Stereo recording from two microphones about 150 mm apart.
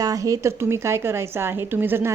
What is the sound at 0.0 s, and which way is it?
A woman's voice, 20° right (ahead or behind).